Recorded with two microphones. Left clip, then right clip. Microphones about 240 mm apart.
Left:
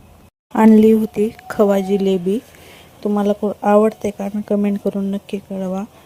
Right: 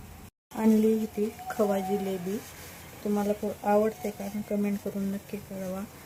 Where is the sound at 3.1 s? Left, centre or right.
Left.